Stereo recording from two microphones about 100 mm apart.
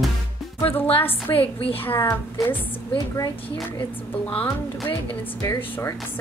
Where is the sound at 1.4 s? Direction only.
65° left (ahead or behind).